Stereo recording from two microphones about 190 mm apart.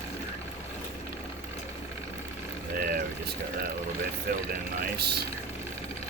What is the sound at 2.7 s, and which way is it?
Vehicle, 50° right (ahead or behind).